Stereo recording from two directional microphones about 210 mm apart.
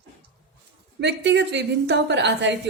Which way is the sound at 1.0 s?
55° right (ahead or behind).